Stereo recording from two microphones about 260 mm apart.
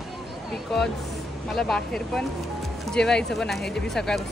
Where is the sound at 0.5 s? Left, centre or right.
Centre.